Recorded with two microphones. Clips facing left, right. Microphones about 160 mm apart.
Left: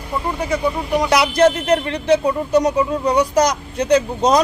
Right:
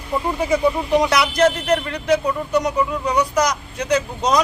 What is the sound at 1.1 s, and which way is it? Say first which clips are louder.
Speech: left 3 dB; 25° left (ahead or behind).